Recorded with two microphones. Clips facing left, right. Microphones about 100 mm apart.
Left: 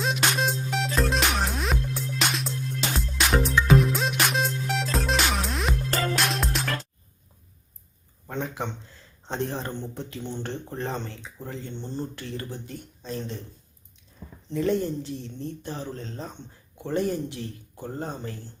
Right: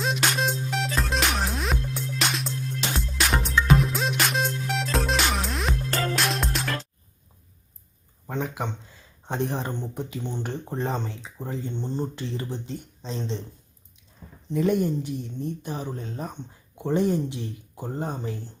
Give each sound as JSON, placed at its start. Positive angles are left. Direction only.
{"t": 0.0, "sound": "music", "side_deg": 0}
{"t": 8.3, "sound": "speech", "side_deg": -10}
{"t": 14.5, "sound": "speech", "side_deg": -15}